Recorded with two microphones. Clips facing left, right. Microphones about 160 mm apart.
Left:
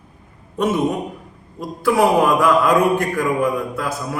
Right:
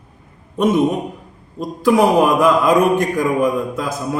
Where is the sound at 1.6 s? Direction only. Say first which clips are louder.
Right 3 dB; 20° right (ahead or behind).